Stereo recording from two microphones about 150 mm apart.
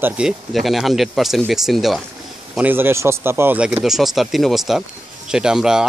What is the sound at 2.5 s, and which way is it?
Speech, 10° right (ahead or behind).